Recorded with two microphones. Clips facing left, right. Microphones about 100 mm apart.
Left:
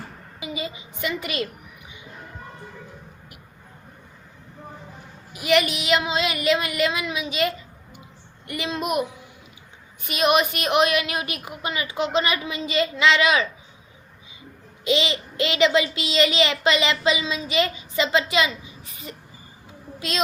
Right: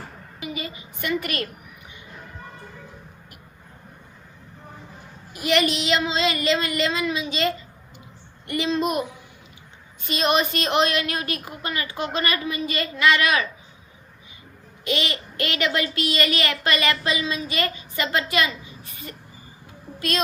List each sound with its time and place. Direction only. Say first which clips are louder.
0.3 s a woman's voice: left 1 dB; 15° left (ahead or behind)
5.3 s a woman's voice: left 1 dB; 5° left (ahead or behind)
10.1 s a woman's voice: left 2 dB; 10° left (ahead or behind)
14.8 s a woman's voice: left 4 dB; 20° left (ahead or behind)